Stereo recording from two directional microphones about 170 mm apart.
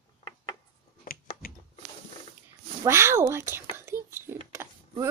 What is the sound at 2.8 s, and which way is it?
Whispering, 15° right (ahead or behind).